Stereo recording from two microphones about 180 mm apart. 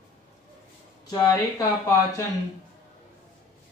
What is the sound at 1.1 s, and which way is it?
Speech, 20° left (ahead or behind).